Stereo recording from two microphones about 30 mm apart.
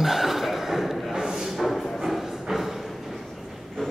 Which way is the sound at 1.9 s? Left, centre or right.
Centre.